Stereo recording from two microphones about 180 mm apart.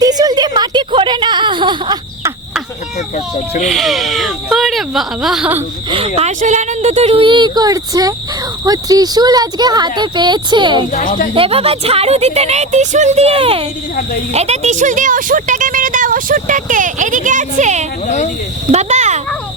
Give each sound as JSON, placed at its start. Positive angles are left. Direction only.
{"t": 0.0, "sound": "a sound", "side_deg": -20}
{"t": 3.6, "sound": "speech", "side_deg": 0}
{"t": 6.1, "sound": "speech", "side_deg": -40}
{"t": 10.9, "sound": "speech", "side_deg": 50}
{"t": 11.3, "sound": "speech", "side_deg": -30}
{"t": 18.0, "sound": "speech", "side_deg": 40}
{"t": 18.7, "sound": "speech", "side_deg": -40}